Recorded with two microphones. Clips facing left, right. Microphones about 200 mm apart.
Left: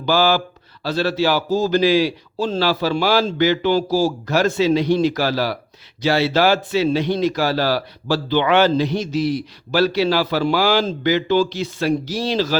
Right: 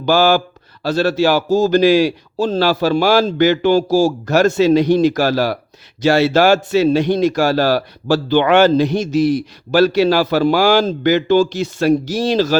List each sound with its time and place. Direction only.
0.0 s speech: 50° right (ahead or behind)